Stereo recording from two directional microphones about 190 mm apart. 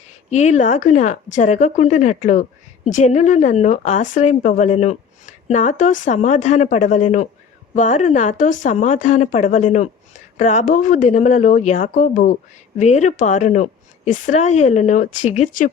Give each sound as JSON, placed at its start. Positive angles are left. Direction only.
{"t": 0.1, "sound": "speech", "side_deg": 35}